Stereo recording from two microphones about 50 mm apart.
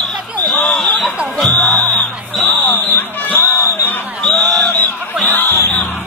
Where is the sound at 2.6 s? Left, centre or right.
Left.